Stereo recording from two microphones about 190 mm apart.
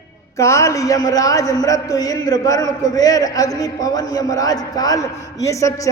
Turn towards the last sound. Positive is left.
turn(degrees=15)  # may be behind; listen again after turning